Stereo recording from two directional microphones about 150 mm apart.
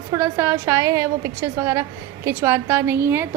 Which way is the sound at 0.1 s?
20° right (ahead or behind).